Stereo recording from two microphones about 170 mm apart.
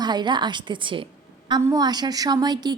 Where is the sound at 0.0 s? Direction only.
25° right (ahead or behind).